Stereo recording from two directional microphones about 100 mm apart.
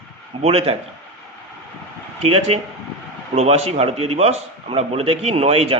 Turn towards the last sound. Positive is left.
turn(degrees=-90)